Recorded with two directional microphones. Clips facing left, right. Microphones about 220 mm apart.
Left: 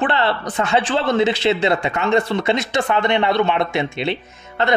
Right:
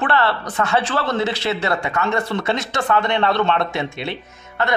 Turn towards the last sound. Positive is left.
turn(degrees=20)  # may be behind; listen again after turning